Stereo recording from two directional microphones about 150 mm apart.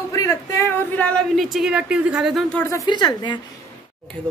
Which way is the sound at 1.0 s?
5° left (ahead or behind).